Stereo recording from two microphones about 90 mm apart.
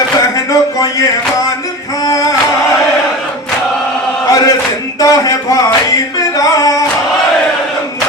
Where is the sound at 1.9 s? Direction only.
40° left (ahead or behind).